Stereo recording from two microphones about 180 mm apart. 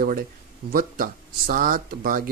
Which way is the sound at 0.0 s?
50° right (ahead or behind).